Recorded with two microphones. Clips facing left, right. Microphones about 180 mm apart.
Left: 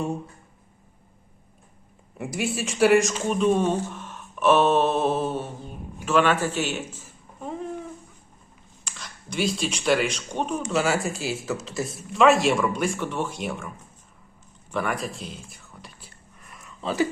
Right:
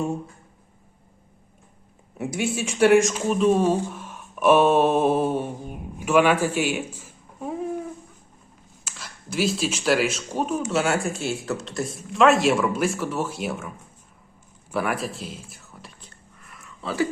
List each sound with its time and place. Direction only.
2.1 s speech: centre (ahead or behind)
16.8 s speech: 20° left (ahead or behind)